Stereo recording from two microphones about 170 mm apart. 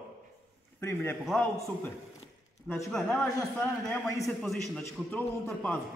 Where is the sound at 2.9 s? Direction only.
5° left (ahead or behind).